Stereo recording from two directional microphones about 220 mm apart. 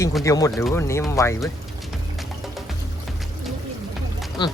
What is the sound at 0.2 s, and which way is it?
Speech, 15° left (ahead or behind).